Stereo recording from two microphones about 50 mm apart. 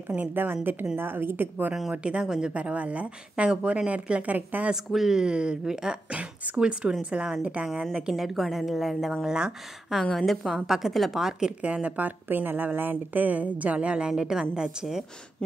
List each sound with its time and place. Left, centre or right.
0.3 s a woman's voice: right
1.9 s speech: centre
2.5 s speech: right
4.9 s speech: centre
7.9 s a woman's voice: centre
9.2 s speech: centre
10.1 s a woman's voice: centre
11.2 s speech: centre
11.6 s speech: right
12.3 s speech: right; by 15.0 s centre